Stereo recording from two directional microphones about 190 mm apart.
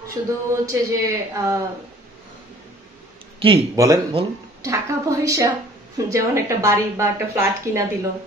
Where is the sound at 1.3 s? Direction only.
15° right (ahead or behind).